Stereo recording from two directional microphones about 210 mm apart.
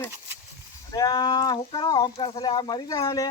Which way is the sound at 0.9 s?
20° left (ahead or behind).